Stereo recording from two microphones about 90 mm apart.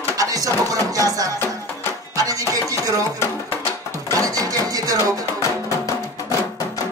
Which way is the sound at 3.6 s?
40° right (ahead or behind).